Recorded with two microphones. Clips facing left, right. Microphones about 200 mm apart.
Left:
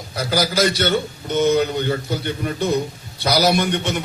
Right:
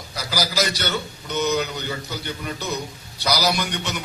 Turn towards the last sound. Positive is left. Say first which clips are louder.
# left 6 dB
turn(degrees=55)  # may be behind; listen again after turning